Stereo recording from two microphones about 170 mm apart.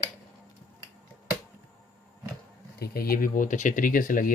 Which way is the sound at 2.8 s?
65° left (ahead or behind).